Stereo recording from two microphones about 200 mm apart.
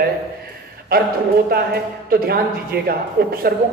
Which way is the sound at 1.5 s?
50° right (ahead or behind).